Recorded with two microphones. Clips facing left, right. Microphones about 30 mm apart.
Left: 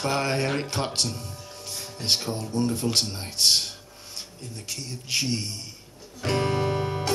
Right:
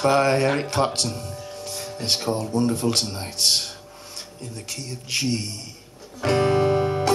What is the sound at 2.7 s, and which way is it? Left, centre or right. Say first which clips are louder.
Speech: right 3 dB; centre.